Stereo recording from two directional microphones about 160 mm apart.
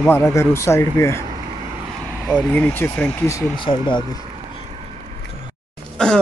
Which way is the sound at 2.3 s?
5° left (ahead or behind).